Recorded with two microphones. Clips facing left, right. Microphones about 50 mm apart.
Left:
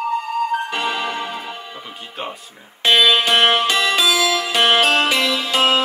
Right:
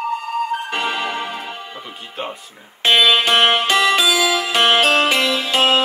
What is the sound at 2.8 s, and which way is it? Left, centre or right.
Music, right.